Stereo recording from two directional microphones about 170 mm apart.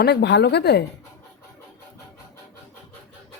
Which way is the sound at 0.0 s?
75° left (ahead or behind).